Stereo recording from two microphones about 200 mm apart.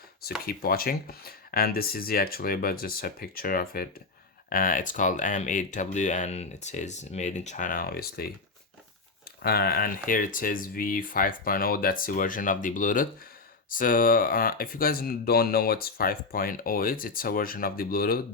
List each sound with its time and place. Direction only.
0.4 s speech: 45° left (ahead or behind)
9.4 s speech: 50° left (ahead or behind)